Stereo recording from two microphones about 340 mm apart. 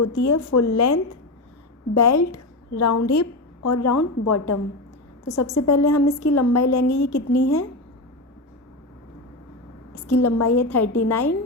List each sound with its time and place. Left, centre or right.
0.0 s a woman's voice: left
10.1 s a woman's voice: left